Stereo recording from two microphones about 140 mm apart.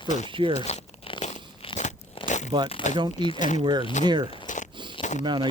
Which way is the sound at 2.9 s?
35° right (ahead or behind).